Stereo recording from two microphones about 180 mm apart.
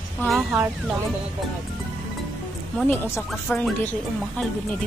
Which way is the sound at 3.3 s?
5° left (ahead or behind).